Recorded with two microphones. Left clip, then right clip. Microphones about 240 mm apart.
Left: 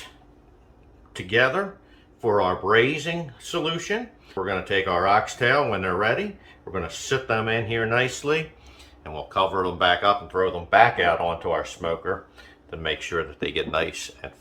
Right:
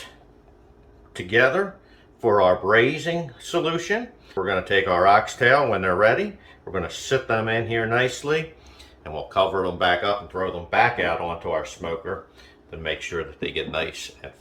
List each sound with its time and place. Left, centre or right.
1.1 s speech: centre